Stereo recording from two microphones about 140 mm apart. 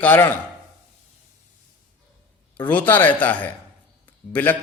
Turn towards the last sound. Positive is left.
turn(degrees=10)  # may be behind; listen again after turning